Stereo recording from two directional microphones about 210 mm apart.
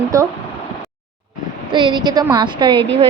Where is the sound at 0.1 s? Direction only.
15° right (ahead or behind).